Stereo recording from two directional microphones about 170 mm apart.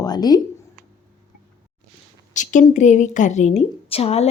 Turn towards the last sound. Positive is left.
turn(degrees=35)  # may be behind; listen again after turning